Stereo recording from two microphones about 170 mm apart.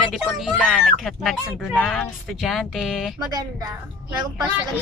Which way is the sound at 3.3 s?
20° right (ahead or behind).